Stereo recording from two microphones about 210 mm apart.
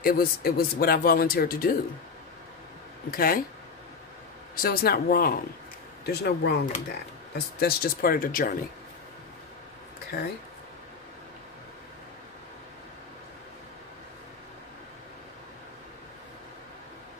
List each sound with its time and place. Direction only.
0.0 s speech: 45° left (ahead or behind)
3.1 s speech: 45° left (ahead or behind)
4.6 s speech: 45° left (ahead or behind)